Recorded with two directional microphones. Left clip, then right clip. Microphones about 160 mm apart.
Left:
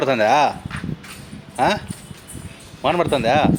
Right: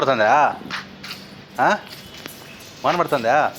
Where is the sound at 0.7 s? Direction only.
75° right (ahead or behind).